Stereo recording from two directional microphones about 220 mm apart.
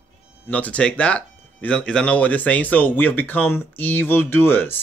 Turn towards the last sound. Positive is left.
turn(degrees=10)  # may be behind; listen again after turning